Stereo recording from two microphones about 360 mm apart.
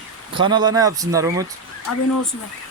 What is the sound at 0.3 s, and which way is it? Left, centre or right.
Speech, centre.